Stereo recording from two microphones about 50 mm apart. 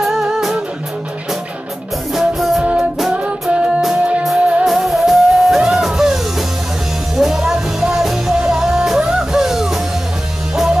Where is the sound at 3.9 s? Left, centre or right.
Right.